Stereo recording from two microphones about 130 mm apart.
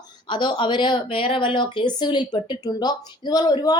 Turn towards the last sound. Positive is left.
turn(degrees=30)  # may be behind; listen again after turning